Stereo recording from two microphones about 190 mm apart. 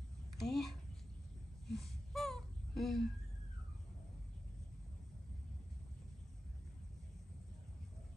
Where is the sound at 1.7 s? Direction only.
Centre (ahead or behind).